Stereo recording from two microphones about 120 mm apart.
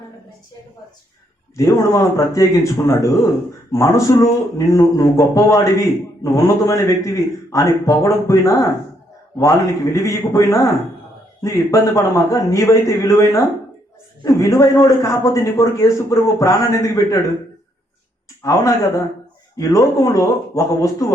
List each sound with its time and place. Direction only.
1.5 s a man's voice: 30° left (ahead or behind)
18.4 s a man's voice: 25° left (ahead or behind)